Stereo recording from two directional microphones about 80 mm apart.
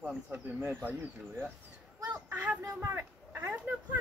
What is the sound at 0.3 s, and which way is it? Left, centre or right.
Speech, right.